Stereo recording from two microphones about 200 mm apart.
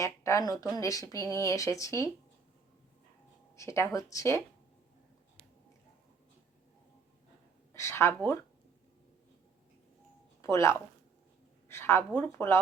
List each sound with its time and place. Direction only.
0.0 s speech: 15° left (ahead or behind)
3.5 s speech: 15° left (ahead or behind)
7.7 s speech: 15° left (ahead or behind)
10.4 s speech: 15° left (ahead or behind)